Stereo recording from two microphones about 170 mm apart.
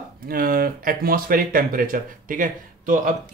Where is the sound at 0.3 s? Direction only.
60° right (ahead or behind).